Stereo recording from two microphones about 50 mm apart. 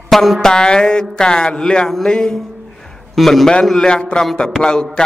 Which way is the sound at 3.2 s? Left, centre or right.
Centre.